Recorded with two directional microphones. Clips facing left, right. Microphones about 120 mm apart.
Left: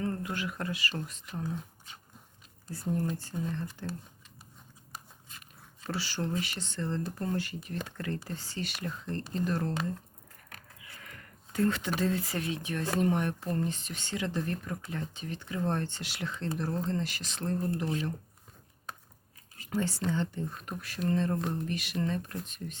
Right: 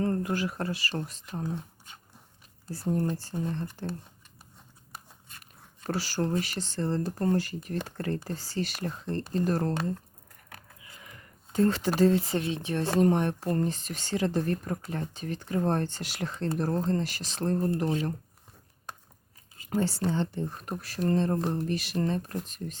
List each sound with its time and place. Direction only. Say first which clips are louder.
0.0 s speech: right 6 dB; 40° right (ahead or behind)
2.6 s speech: right 3 dB; 35° right (ahead or behind)
5.8 s speech: right 5 dB; 45° right (ahead or behind)
10.9 s a sound: left 1 dB; 15° right (ahead or behind)
11.6 s speech: right 6 dB; 35° right (ahead or behind)
19.8 s speech: right 3 dB; 30° right (ahead or behind)